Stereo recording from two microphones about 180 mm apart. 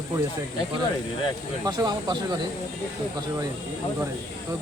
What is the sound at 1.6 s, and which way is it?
Speech, 20° right (ahead or behind).